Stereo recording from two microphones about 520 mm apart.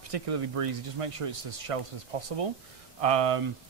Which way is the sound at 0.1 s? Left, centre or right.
Right.